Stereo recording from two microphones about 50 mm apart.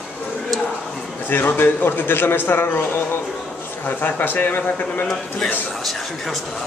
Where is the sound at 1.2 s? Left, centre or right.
Left.